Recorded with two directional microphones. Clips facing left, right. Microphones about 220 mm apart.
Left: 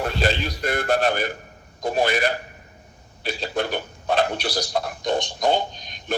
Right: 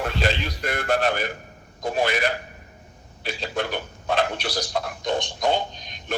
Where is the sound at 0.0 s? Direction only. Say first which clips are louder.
Left 2 dB; 35° left (ahead or behind).